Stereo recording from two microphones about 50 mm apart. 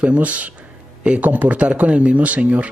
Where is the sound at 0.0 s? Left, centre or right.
Right.